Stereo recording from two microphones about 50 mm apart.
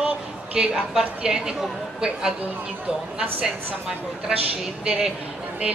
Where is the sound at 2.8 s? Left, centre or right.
Centre.